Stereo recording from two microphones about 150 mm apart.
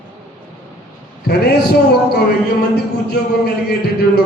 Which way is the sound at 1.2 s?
90° left.